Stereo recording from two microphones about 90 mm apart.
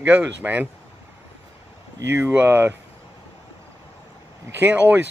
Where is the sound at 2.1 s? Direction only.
25° right (ahead or behind).